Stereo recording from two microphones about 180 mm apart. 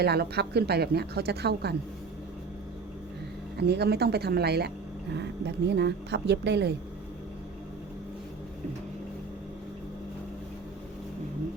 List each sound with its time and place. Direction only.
0.0 s a woman's voice: 65° right (ahead or behind)
3.6 s a woman's voice: 65° right (ahead or behind)